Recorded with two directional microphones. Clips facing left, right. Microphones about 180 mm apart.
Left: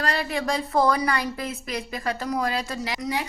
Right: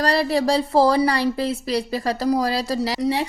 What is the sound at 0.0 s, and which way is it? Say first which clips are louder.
A woman's voice: right 7 dB; 35° right (ahead or behind).